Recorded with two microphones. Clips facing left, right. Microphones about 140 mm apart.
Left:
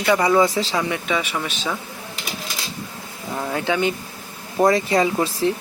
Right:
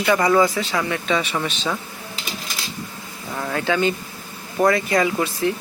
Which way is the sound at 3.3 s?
15° left (ahead or behind).